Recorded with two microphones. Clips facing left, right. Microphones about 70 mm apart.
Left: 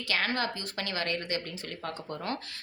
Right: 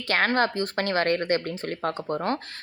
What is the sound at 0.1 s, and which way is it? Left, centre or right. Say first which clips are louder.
Speech: right 8 dB; right.